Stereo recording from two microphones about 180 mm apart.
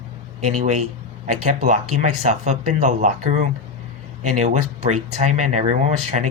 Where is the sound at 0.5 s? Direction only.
40° right (ahead or behind).